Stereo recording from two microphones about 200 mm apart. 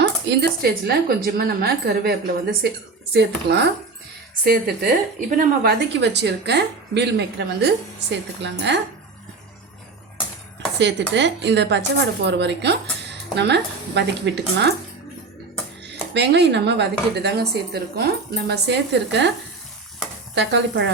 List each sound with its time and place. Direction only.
0.0 s speech: 60° right (ahead or behind)
11.1 s speech: 60° right (ahead or behind)
15.9 s speech: 60° right (ahead or behind)
20.3 s speech: 60° right (ahead or behind)